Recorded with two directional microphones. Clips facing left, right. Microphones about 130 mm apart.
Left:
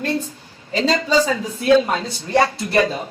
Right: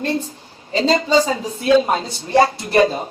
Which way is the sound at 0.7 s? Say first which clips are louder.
Right 2 dB; 30° right (ahead or behind).